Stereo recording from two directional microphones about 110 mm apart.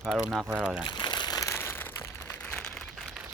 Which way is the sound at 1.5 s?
20° left (ahead or behind).